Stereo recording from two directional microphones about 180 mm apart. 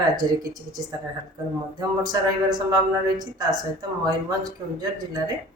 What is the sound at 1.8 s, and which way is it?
Speech, 20° right (ahead or behind).